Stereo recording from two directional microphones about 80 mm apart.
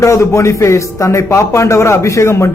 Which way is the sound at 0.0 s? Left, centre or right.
Left.